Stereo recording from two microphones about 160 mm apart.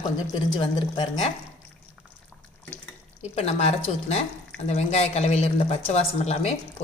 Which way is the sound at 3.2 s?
40° left (ahead or behind).